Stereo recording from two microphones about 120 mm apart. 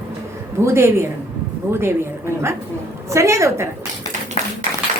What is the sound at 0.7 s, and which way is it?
Speech, 20° right (ahead or behind).